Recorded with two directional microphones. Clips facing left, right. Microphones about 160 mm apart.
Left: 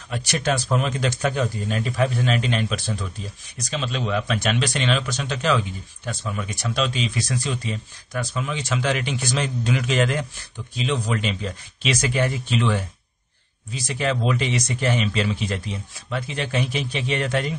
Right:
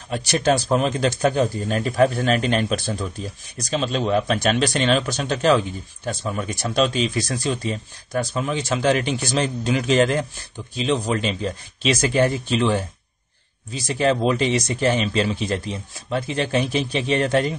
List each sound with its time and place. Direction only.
0.1 s speech: 30° right (ahead or behind)
13.8 s speech: 30° right (ahead or behind)